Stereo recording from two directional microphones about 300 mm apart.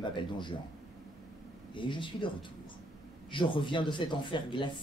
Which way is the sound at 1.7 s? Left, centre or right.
Centre.